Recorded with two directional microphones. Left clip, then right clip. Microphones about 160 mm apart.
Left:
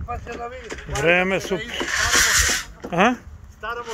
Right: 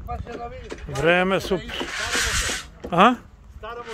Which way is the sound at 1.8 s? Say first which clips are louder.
Left 7 dB; 60° left (ahead or behind).